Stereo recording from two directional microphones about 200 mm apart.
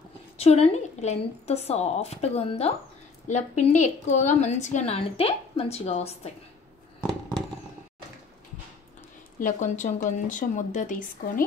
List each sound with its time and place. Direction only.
0.4 s a woman's voice: 30° left (ahead or behind)
7.0 s a sound: 5° left (ahead or behind)
9.4 s a woman's voice: 40° left (ahead or behind)